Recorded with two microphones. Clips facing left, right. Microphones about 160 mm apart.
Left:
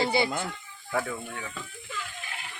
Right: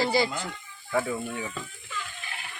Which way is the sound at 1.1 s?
15° right (ahead or behind).